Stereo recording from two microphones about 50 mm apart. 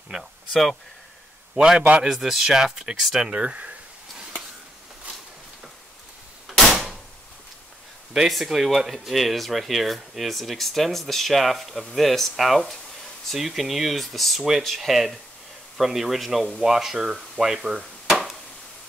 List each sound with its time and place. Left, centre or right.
0.1 s speech: centre
1.6 s speech: centre
2.0 s speech: centre
3.3 s speech: right
8.1 s speech: centre